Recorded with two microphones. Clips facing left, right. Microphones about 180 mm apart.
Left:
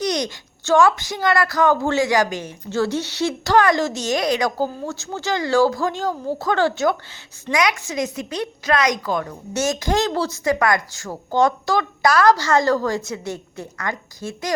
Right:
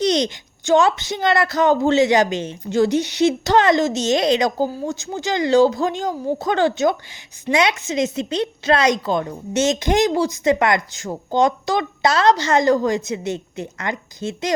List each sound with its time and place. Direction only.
0.0 s a woman's voice: 25° right (ahead or behind)